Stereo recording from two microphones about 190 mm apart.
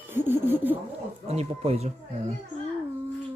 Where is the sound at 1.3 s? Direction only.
35° right (ahead or behind).